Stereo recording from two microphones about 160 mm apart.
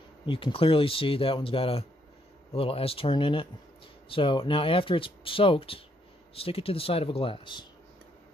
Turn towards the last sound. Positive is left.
turn(degrees=30)  # may be behind; listen again after turning